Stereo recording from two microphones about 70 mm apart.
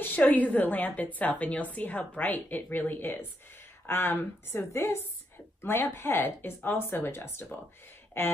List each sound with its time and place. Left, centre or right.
0.0 s a woman's voice: left